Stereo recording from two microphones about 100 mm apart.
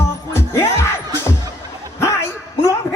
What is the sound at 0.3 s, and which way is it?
Music, 30° left (ahead or behind).